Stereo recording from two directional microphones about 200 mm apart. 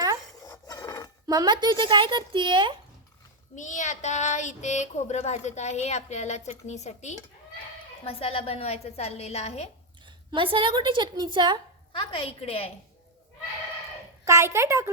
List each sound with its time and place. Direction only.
0.3 s filing: 20° left (ahead or behind)
1.3 s a woman's voice: 20° right (ahead or behind)
3.5 s speech: 40° left (ahead or behind)
10.3 s a woman's voice: 25° right (ahead or behind)
11.9 s a woman's voice: 25° left (ahead or behind)
14.3 s a woman's voice: 15° right (ahead or behind)